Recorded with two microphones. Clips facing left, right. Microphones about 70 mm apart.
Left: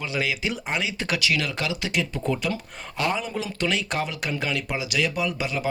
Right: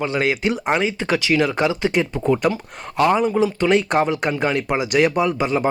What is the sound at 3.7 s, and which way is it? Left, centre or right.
Speech, right.